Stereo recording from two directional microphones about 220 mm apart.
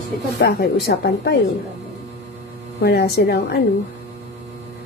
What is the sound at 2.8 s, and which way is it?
Speech, 45° left (ahead or behind).